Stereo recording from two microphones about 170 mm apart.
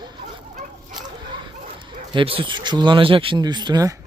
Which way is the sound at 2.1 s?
30° right (ahead or behind).